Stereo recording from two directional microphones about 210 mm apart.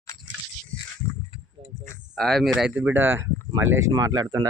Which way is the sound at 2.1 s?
Centre (ahead or behind).